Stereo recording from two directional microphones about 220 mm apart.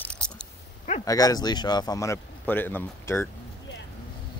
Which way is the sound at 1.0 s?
15° left (ahead or behind).